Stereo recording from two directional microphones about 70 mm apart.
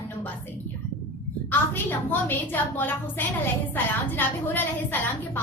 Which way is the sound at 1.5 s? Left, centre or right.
Left.